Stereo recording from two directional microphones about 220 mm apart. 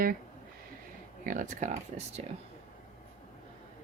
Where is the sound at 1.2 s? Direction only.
35° right (ahead or behind).